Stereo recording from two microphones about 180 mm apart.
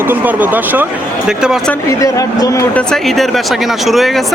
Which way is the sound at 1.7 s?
15° left (ahead or behind).